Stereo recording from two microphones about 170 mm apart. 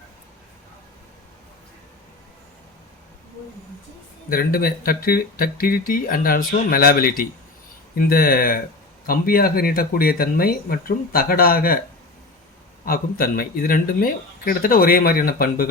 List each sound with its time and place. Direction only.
4.3 s speech: 60° left (ahead or behind)
12.8 s speech: 60° left (ahead or behind)